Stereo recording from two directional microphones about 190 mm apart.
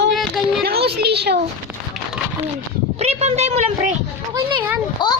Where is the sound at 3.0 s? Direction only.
35° right (ahead or behind).